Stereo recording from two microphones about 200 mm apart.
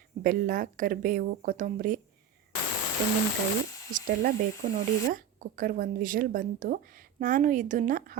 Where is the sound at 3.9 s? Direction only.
45° right (ahead or behind).